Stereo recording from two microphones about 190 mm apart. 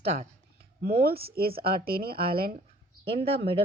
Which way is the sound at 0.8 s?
55° right (ahead or behind).